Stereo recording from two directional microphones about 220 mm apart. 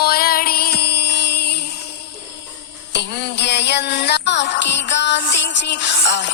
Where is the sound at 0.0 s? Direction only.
45° left (ahead or behind).